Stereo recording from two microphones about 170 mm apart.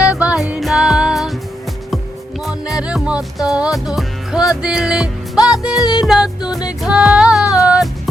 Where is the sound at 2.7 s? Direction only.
5° right (ahead or behind).